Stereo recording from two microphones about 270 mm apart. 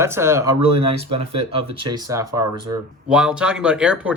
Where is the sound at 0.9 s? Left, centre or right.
Right.